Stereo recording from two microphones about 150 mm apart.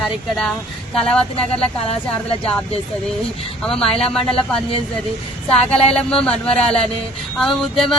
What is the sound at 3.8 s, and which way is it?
Speech, 40° left (ahead or behind).